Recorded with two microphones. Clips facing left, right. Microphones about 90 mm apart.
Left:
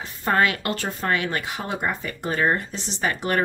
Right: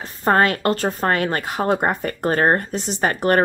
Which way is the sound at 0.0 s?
40° right (ahead or behind).